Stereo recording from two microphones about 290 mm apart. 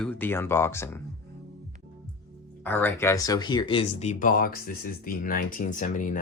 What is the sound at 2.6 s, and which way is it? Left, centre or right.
Speech, centre.